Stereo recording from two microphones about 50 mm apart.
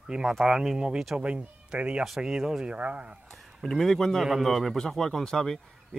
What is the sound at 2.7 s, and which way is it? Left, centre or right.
Speech, right.